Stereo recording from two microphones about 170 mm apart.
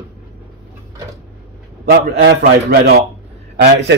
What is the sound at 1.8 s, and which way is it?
Speech, 70° right (ahead or behind).